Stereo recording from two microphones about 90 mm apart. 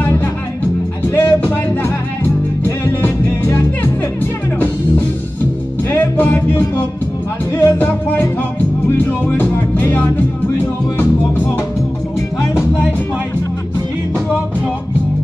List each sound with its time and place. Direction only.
1.0 s music: 25° left (ahead or behind)
5.9 s music: 20° left (ahead or behind)